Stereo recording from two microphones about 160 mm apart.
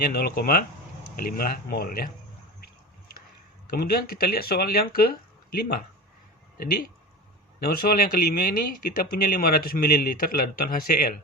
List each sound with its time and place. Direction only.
0.0 s speech: 70° left (ahead or behind)
3.7 s speech: 70° left (ahead or behind)
7.6 s speech: 65° left (ahead or behind)